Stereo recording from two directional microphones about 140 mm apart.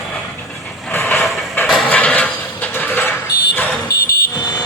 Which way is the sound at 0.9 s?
15° left (ahead or behind).